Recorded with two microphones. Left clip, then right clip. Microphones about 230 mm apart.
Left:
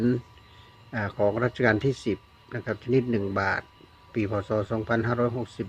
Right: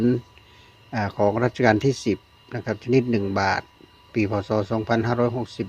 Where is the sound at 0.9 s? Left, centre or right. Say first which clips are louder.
Right 4 dB; right.